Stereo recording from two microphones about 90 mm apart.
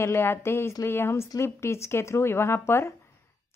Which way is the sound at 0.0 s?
25° left (ahead or behind).